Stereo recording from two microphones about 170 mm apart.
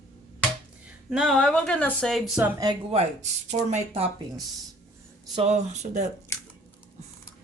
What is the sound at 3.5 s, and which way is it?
Speech, 40° right (ahead or behind).